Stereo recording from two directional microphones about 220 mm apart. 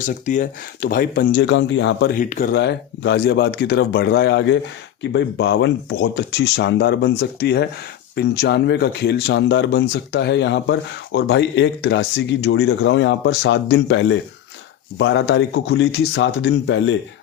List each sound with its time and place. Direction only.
0.3 s speech: 40° left (ahead or behind); by 2.0 s 55° left (ahead or behind)
2.1 s speech: 35° left (ahead or behind); by 17.0 s 60° left (ahead or behind)